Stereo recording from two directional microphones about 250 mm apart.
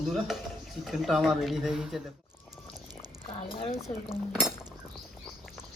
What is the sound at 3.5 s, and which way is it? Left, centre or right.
Speech, left.